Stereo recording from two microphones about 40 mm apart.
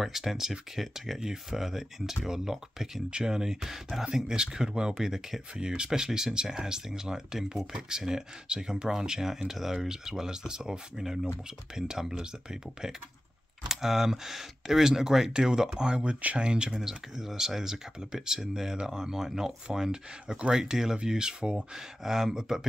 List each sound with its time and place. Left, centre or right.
0.0 s speech: centre
3.1 s speech: right
13.7 s speech: centre